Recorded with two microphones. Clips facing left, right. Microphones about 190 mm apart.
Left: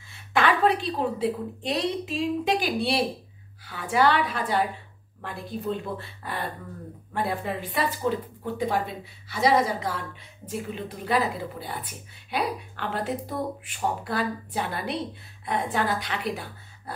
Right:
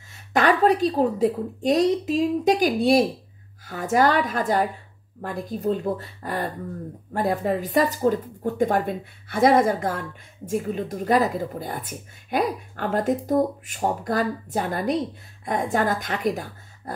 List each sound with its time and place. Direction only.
0.1 s a woman's voice: 40° right (ahead or behind)